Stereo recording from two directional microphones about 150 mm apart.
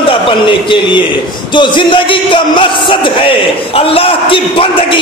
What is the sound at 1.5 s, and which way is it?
A man's voice, 35° left (ahead or behind).